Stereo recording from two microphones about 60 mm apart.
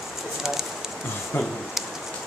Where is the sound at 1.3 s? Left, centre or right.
Left.